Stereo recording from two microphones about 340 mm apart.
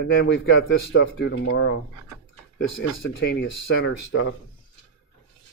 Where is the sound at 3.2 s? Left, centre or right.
Left.